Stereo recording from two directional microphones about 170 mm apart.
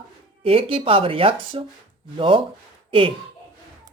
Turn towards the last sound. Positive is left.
turn(degrees=-30)  # may be behind; listen again after turning